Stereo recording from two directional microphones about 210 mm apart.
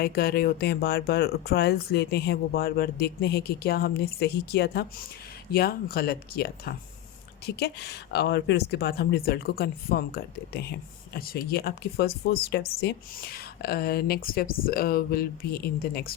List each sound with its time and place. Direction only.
0.0 s speech: 45° left (ahead or behind)